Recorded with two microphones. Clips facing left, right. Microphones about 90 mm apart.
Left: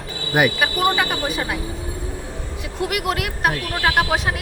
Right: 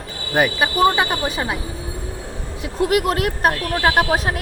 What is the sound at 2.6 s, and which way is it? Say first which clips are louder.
Speech: right 6 dB; 35° right (ahead or behind).